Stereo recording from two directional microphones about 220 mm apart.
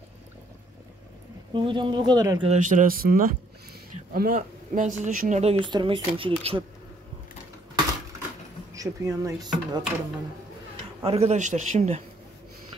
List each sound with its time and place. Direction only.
1.5 s speech: 20° right (ahead or behind)
2.4 s speech: 35° right (ahead or behind)
8.7 s speech: 15° right (ahead or behind)
11.1 s speech: 30° right (ahead or behind)